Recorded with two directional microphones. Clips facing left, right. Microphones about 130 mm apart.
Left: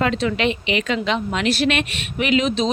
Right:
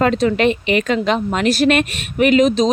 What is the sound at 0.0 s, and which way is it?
Speech, 40° right (ahead or behind).